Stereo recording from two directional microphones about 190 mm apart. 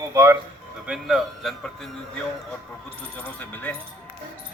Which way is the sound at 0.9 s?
Centre (ahead or behind).